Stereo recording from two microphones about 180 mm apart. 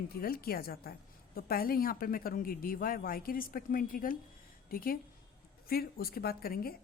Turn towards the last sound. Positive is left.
turn(degrees=55)  # may be behind; listen again after turning